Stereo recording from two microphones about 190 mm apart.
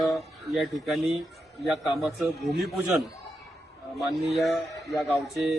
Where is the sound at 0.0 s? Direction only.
Centre (ahead or behind).